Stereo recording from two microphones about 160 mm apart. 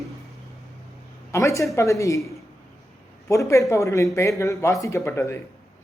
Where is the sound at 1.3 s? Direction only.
20° left (ahead or behind).